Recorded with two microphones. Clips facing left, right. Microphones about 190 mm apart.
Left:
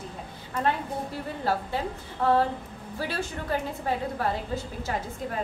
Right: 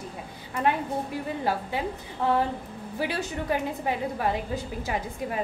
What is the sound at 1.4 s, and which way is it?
A woman's voice, 15° right (ahead or behind).